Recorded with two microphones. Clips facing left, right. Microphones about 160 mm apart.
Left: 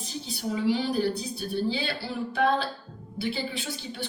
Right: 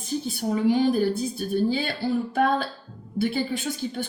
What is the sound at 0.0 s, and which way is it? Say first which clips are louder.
A woman's voice: right 6 dB; 50° right (ahead or behind).